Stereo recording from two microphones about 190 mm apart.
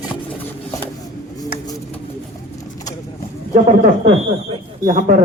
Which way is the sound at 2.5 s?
20° left (ahead or behind).